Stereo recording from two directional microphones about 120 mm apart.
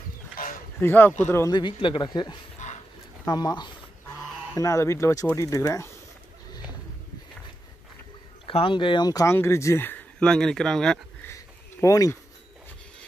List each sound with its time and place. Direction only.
0.7 s speech: 15° left (ahead or behind)
1.5 s speech: 45° left (ahead or behind)
2.6 s a sound: 90° left
3.3 s speech: 35° left (ahead or behind)
4.6 s speech: 25° left (ahead or behind)
8.5 s speech: 50° left (ahead or behind); by 11.0 s 5° left (ahead or behind)
11.2 s a sound: 25° left (ahead or behind)